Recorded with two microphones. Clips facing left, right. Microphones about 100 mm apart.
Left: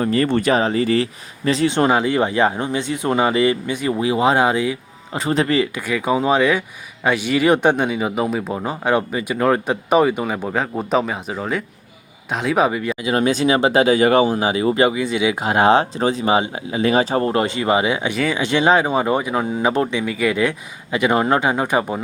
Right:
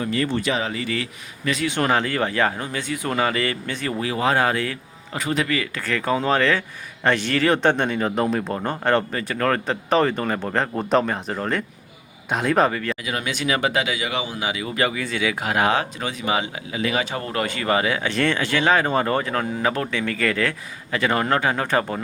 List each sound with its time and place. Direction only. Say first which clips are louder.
0.0 s speech: left 6 dB; 40° left (ahead or behind); by 4.8 s 15° left (ahead or behind)
5.1 s speech: left 5 dB; 30° left (ahead or behind)
5.7 s speech: left 3 dB; 10° left (ahead or behind)
13.0 s speech: left 9 dB; 30° left (ahead or behind); by 22.0 s 15° left (ahead or behind)